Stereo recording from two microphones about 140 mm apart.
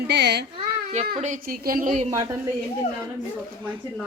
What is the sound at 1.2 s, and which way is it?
Speech, 75° right (ahead or behind).